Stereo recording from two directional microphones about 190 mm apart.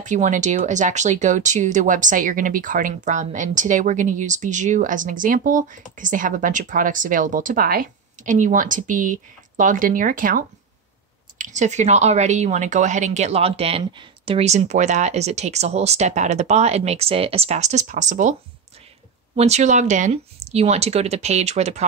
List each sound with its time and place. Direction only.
0.0 s speech: 40° right (ahead or behind)
19.3 s speech: 35° right (ahead or behind)